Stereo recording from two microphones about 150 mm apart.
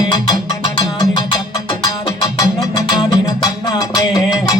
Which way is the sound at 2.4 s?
25° left (ahead or behind).